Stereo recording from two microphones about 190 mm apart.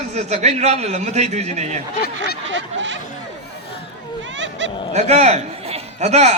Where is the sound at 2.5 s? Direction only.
75° right (ahead or behind).